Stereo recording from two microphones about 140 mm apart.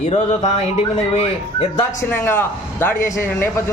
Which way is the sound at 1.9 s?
15° left (ahead or behind).